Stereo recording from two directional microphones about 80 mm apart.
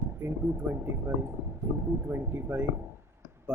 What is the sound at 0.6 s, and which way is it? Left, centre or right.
Speech, right.